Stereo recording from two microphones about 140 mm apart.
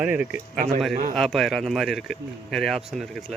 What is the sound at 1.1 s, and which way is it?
Speech, centre (ahead or behind).